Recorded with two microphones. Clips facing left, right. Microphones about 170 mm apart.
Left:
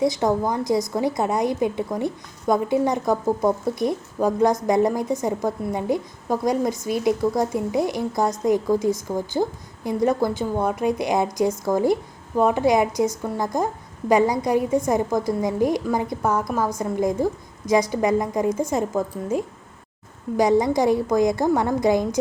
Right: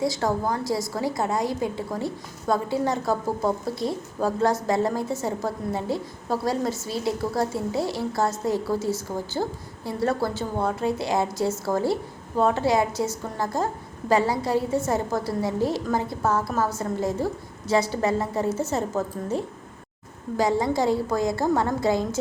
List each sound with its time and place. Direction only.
0.0 s a woman's voice: 20° left (ahead or behind)